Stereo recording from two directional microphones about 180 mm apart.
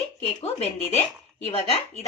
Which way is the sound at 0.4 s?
35° left (ahead or behind).